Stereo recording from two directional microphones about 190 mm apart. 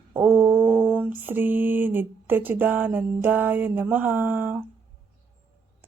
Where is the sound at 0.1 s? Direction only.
10° right (ahead or behind).